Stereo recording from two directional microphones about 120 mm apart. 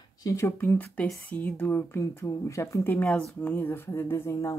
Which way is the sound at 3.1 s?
5° left (ahead or behind).